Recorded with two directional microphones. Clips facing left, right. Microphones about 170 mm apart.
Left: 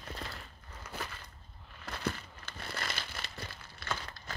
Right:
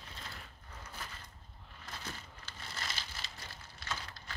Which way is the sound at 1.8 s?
65° left (ahead or behind).